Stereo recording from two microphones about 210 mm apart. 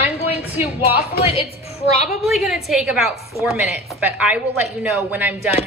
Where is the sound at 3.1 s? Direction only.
15° right (ahead or behind).